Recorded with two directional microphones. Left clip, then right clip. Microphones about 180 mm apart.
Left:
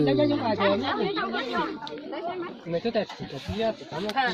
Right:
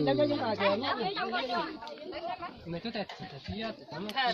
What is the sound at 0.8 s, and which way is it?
Speech, 40° right (ahead or behind).